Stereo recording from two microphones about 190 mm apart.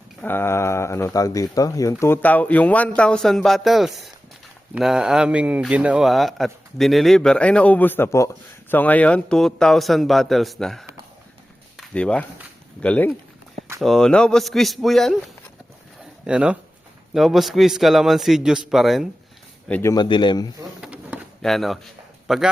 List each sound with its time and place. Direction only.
0.2 s speech: 10° left (ahead or behind)
16.2 s speech: 5° right (ahead or behind)
19.9 s speech: 25° left (ahead or behind)
20.8 s pigeon: 5° right (ahead or behind)
22.3 s speech: centre (ahead or behind)